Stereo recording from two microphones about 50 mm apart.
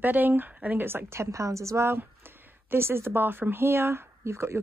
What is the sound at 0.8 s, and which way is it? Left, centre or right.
A woman's voice, right.